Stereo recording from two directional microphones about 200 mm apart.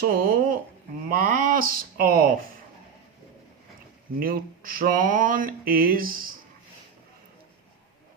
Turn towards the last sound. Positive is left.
turn(degrees=-45)  # may be behind; listen again after turning